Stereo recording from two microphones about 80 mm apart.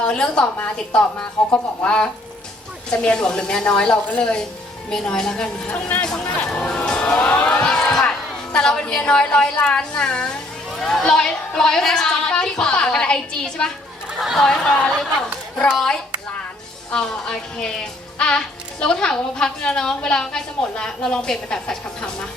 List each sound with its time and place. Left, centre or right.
0.0 s speech: centre
6.1 s music: centre
8.5 s speech: centre
14.1 s speech: centre
14.3 s speech: centre
16.9 s speech: centre